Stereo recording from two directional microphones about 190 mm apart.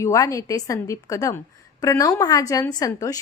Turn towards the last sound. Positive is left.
turn(degrees=20)  # may be behind; listen again after turning